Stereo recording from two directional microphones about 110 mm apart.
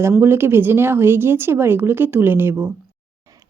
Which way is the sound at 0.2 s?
20° right (ahead or behind).